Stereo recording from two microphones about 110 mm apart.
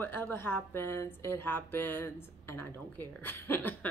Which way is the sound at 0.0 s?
20° left (ahead or behind).